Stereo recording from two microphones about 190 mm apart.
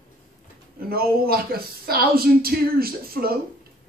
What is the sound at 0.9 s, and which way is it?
Speech, 55° right (ahead or behind).